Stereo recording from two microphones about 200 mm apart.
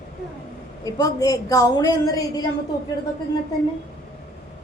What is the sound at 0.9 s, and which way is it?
A woman's voice, 20° left (ahead or behind).